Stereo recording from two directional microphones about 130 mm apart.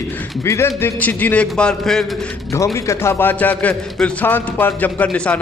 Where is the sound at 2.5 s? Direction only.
25° left (ahead or behind).